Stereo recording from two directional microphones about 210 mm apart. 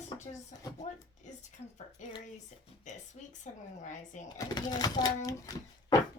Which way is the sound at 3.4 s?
35° left (ahead or behind).